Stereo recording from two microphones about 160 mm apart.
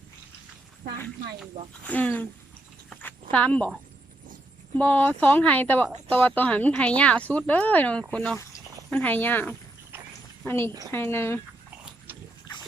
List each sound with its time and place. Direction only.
1.8 s speech: 10° left (ahead or behind)
2.9 s a sound: 10° left (ahead or behind)
4.8 s a woman's voice: 10° left (ahead or behind)